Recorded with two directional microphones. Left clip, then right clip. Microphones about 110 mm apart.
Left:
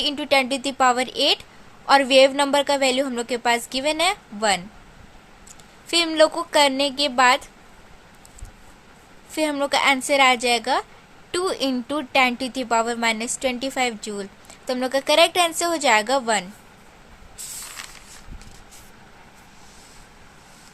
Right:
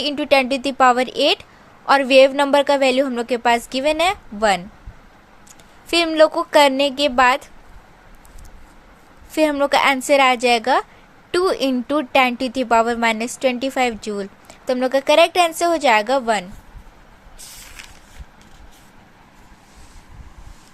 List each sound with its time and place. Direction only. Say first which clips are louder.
0.0 s a woman's voice: right 3 dB; 30° right (ahead or behind)
6.1 s a woman's voice: right 4 dB; 30° right (ahead or behind)
9.3 s a woman's voice: right 5 dB; 25° right (ahead or behind)